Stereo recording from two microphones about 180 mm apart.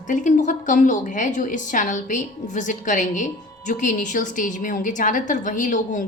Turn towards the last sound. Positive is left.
turn(degrees=45)  # may be behind; listen again after turning